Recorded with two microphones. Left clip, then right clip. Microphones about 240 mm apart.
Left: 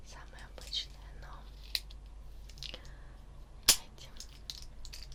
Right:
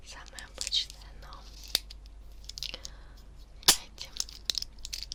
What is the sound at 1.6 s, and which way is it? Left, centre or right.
Scissors, right.